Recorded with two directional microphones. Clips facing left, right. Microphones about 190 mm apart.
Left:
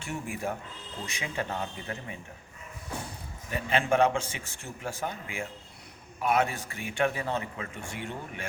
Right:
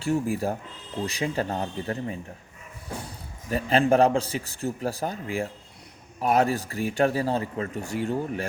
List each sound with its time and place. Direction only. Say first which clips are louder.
0.0 s a man's voice: right 9 dB; 35° right (ahead or behind)
3.5 s a man's voice: right 6 dB; 35° right (ahead or behind)